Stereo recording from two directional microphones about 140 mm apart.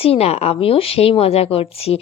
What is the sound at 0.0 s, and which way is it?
A woman's voice, 45° left (ahead or behind).